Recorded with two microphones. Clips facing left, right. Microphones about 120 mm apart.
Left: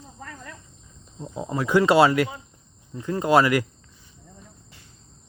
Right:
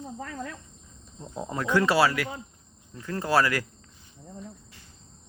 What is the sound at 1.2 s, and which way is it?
Speech, 5° left (ahead or behind).